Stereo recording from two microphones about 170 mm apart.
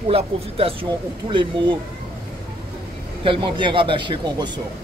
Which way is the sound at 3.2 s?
30° right (ahead or behind).